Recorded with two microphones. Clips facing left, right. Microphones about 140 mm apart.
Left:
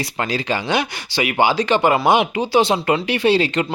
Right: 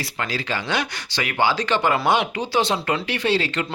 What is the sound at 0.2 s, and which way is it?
Speech, 15° left (ahead or behind).